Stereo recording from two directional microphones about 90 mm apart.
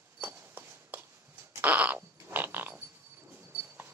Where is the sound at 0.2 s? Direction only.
20° right (ahead or behind).